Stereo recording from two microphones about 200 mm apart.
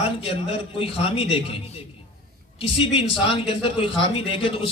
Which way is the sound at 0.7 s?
25° left (ahead or behind).